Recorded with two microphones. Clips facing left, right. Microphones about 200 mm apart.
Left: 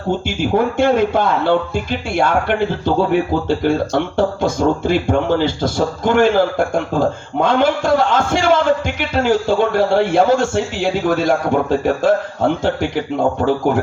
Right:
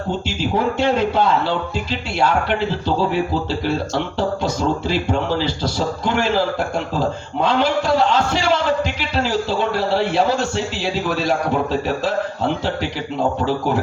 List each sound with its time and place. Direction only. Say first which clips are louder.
0.3 s a man's voice: left 3 dB; 50° left (ahead or behind)